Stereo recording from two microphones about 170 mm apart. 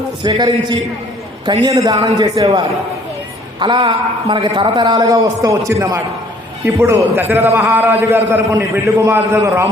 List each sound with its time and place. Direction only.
0.2 s a man's voice: 25° right (ahead or behind)
3.6 s a man's voice: 30° right (ahead or behind)